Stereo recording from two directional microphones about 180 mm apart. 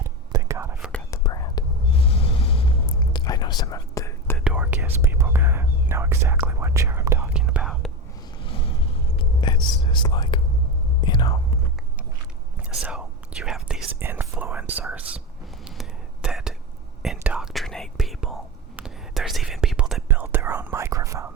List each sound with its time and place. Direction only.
0.3 s whispering: 15° right (ahead or behind)
1.1 s whispering: 20° left (ahead or behind)
2.0 s whispering: 30° left (ahead or behind)
4.4 s whispering: 5° right (ahead or behind)
7.4 s whispering: 5° right (ahead or behind)
8.4 s vehicle: 30° left (ahead or behind)
9.1 s whispering: 25° left (ahead or behind)
12.8 s whispering: 5° right (ahead or behind)
20.1 s whispering: 10° right (ahead or behind)